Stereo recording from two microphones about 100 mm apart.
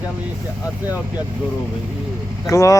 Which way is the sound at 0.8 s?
15° right (ahead or behind).